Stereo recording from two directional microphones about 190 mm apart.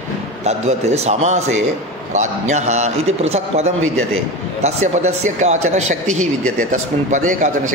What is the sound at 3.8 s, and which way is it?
Speech, 90° right.